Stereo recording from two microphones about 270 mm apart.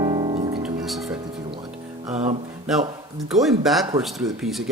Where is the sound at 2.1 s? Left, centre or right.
Right.